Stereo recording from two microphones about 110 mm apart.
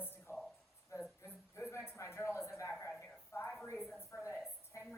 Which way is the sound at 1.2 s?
25° left (ahead or behind).